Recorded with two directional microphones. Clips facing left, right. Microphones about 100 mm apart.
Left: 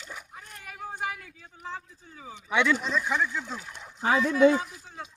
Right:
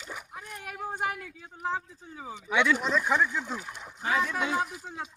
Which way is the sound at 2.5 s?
15° right (ahead or behind).